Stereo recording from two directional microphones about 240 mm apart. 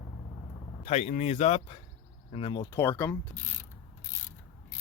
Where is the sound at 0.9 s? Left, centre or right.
Left; by 3.2 s centre.